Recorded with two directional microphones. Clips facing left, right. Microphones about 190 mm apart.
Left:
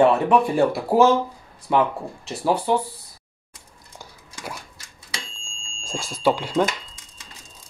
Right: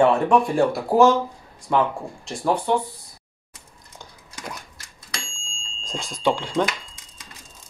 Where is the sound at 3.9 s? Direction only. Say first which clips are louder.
Even; 5° left (ahead or behind).